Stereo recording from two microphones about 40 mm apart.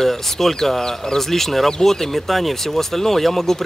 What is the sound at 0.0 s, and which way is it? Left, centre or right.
Speech, centre.